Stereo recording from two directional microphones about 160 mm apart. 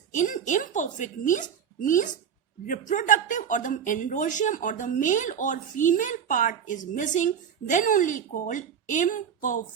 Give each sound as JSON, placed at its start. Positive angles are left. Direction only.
{"t": 0.1, "sound": "a woman's voice", "side_deg": 50}